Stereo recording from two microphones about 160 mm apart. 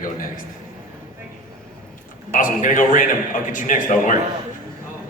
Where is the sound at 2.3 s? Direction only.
55° left (ahead or behind).